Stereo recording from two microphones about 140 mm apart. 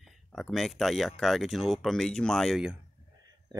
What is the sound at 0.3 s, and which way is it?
Speech, 5° left (ahead or behind).